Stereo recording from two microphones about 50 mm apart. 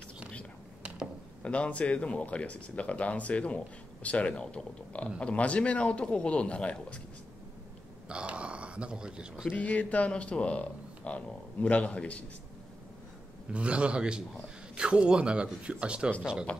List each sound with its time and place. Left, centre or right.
1.4 s speech: left
8.1 s speech: right
9.5 s speech: left
13.5 s speech: right
16.5 s speech: left